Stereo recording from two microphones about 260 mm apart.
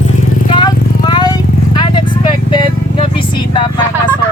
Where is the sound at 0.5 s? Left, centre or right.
Centre.